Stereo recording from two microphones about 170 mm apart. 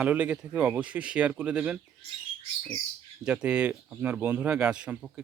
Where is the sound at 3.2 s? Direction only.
5° right (ahead or behind).